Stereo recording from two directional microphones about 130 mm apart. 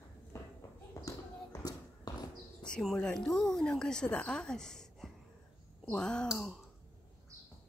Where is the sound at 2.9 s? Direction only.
5° left (ahead or behind).